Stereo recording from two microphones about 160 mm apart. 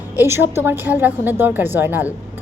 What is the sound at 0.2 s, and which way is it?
A woman's voice, 15° right (ahead or behind).